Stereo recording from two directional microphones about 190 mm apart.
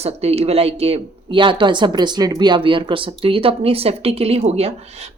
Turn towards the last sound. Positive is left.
turn(degrees=-35)  # may be behind; listen again after turning